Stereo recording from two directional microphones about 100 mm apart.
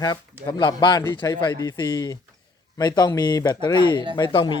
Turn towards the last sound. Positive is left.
turn(degrees=55)  # may be behind; listen again after turning